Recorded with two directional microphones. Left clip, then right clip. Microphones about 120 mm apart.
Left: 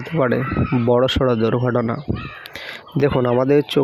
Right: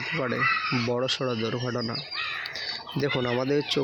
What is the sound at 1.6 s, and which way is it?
Speech, 50° left (ahead or behind).